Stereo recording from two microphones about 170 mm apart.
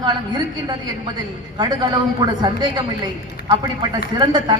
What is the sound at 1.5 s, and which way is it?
A woman's voice, 25° right (ahead or behind).